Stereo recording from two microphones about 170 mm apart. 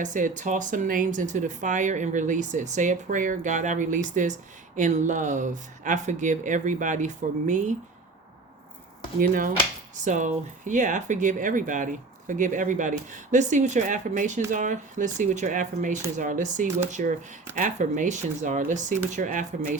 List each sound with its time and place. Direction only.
0.0 s speech: 50° right (ahead or behind)
9.2 s speech: 55° right (ahead or behind)